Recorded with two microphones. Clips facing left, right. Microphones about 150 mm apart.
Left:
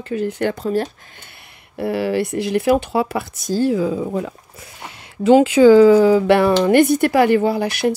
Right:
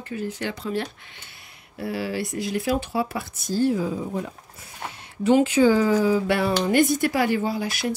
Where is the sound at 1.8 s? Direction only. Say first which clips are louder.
Left 8 dB; 65° left (ahead or behind); by 4.1 s 90° left.